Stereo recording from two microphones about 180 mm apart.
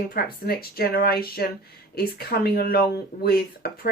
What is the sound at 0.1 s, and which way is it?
Speech, 60° left (ahead or behind).